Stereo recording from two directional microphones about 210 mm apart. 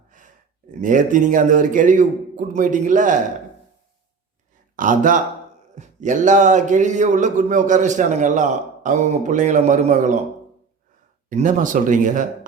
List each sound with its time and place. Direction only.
0.7 s a man's voice: 40° right (ahead or behind)
4.8 s a man's voice: 40° right (ahead or behind)
11.3 s a man's voice: 35° right (ahead or behind)